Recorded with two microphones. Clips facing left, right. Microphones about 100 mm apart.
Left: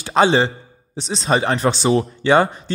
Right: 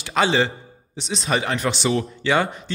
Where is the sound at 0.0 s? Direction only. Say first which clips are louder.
Left 4 dB; 35° left (ahead or behind).